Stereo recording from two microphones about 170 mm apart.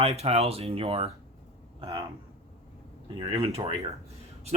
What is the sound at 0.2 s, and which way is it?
Speech, 40° right (ahead or behind).